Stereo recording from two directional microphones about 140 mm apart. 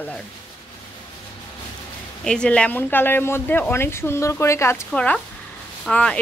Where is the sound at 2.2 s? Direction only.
5° left (ahead or behind).